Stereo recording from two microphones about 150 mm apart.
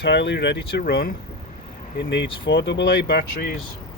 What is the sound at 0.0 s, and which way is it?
Speech, 90° left.